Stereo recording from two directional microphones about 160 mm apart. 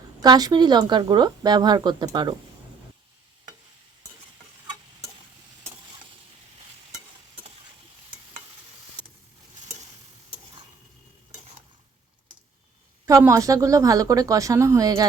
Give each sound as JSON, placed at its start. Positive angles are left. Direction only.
{"t": 0.2, "sound": "speech", "side_deg": -25}
{"t": 13.1, "sound": "speech", "side_deg": -20}